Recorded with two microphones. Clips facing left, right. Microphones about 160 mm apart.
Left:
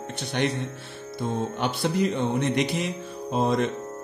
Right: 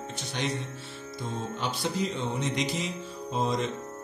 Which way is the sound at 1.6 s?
60° left (ahead or behind).